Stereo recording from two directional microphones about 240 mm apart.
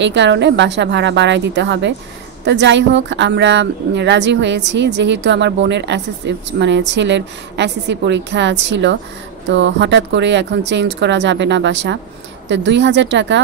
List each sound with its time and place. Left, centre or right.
0.0 s speech: right